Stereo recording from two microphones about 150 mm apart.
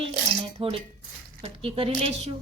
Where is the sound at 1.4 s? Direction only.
40° right (ahead or behind).